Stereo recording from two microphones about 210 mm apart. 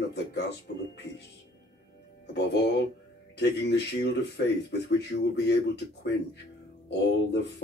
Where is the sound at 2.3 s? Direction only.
55° left (ahead or behind).